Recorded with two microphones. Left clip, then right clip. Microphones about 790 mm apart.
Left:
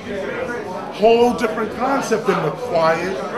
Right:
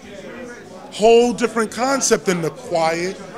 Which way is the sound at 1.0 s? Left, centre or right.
Right.